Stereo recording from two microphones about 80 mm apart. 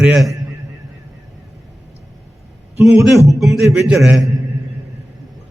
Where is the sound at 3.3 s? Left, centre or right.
Centre.